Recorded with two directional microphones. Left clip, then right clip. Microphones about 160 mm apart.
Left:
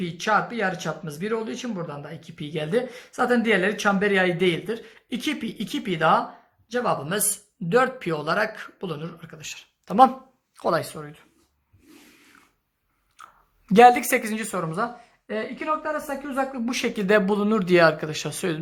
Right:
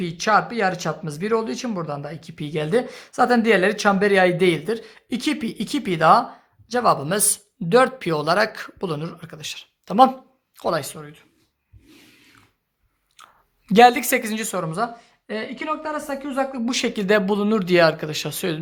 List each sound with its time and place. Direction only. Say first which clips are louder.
0.0 s speech: right 4 dB; 45° right (ahead or behind)
9.8 s speech: right 1 dB; 15° right (ahead or behind); by 11.3 s 5° left (ahead or behind)
13.1 s a woman's voice: left 1 dB; 10° right (ahead or behind)